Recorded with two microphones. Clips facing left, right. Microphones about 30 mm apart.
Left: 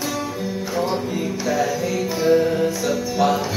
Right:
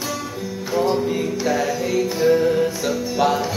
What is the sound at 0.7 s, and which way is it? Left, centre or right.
Music, centre.